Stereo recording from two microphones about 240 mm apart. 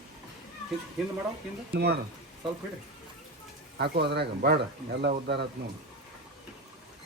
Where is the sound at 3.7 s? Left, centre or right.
Right.